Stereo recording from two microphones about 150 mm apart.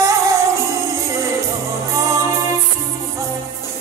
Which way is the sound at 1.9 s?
20° right (ahead or behind).